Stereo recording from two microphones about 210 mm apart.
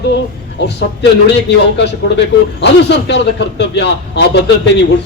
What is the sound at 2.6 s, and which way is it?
A man's voice, 55° left (ahead or behind).